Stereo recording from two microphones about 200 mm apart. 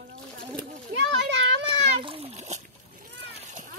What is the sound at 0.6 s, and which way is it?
Children playing, 60° right (ahead or behind).